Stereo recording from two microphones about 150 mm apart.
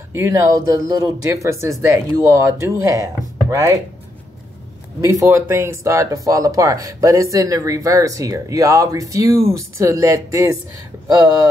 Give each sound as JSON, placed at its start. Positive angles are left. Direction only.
{"t": 0.1, "sound": "speech", "side_deg": -20}
{"t": 5.0, "sound": "speech", "side_deg": -20}